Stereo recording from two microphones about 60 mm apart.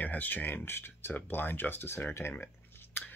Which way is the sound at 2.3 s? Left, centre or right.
Left.